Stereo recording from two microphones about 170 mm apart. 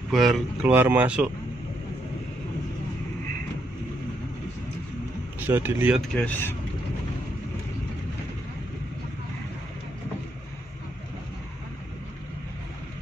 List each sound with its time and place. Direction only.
0.1 s speech: centre (ahead or behind)
5.5 s speech: 10° right (ahead or behind)
5.9 s speech: 5° left (ahead or behind)